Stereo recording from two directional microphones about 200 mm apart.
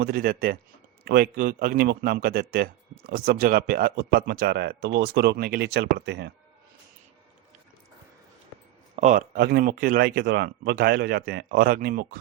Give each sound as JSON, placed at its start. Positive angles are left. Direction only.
{"t": 0.0, "sound": "a man's voice", "side_deg": -50}
{"t": 9.0, "sound": "a man's voice", "side_deg": -40}